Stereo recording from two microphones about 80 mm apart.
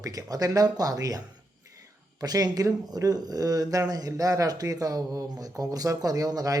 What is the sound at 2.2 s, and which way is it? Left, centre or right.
Speech, right.